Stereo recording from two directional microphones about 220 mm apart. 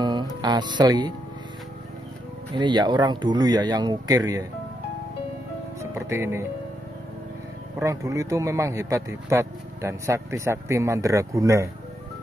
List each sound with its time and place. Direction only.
0.0 s music: 20° right (ahead or behind)
2.5 s speech: 20° right (ahead or behind)
5.8 s music: 10° right (ahead or behind)
7.8 s a man's voice: 15° right (ahead or behind)